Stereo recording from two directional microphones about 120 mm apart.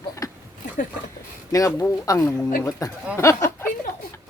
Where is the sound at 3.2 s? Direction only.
25° left (ahead or behind).